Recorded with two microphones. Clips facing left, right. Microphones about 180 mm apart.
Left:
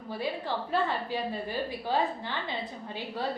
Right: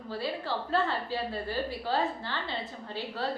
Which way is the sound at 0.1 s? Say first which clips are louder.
Left 1 dB; 15° left (ahead or behind).